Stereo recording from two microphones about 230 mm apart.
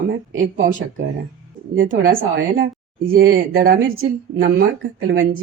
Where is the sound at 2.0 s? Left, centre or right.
Right.